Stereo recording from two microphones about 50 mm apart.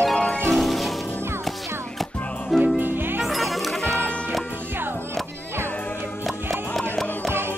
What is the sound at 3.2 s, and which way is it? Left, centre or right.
Music, centre.